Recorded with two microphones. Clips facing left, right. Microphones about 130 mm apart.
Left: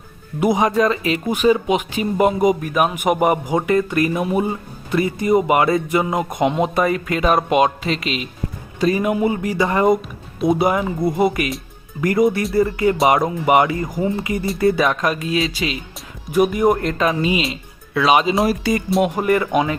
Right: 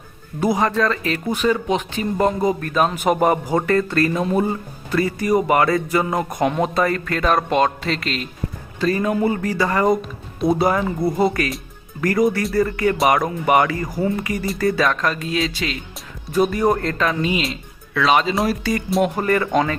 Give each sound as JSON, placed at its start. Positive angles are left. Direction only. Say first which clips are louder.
{"t": 0.3, "sound": "speech", "louder": "left 2 dB", "side_deg": 20}
{"t": 14.8, "sound": "speech", "louder": "left 2 dB", "side_deg": 10}
{"t": 16.3, "sound": "speech", "louder": "left 2 dB", "side_deg": 20}
{"t": 18.9, "sound": "speech", "louder": "even", "side_deg": 0}
{"t": 19.1, "sound": "speech", "louder": "left 1 dB", "side_deg": 15}